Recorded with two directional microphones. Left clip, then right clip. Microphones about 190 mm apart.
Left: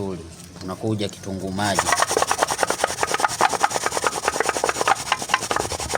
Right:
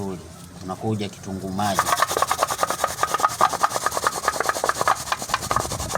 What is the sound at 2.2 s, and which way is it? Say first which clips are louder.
Rub: left 1 dB; 20° left (ahead or behind).